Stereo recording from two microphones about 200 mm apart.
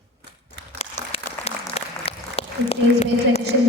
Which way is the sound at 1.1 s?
30° left (ahead or behind).